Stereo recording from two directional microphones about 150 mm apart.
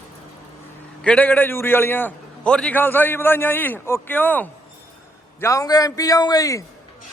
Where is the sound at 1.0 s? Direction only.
10° left (ahead or behind).